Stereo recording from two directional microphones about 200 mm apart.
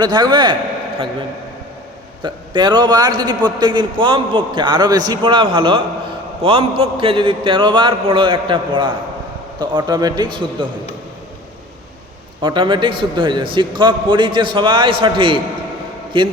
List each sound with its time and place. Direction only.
0.0 s a man's voice: 20° right (ahead or behind)
2.2 s a man's voice: 20° right (ahead or behind)
12.4 s a man's voice: 25° right (ahead or behind)